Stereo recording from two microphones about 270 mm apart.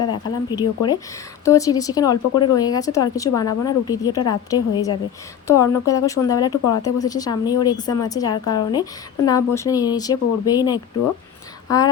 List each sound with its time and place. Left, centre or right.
0.0 s speech: centre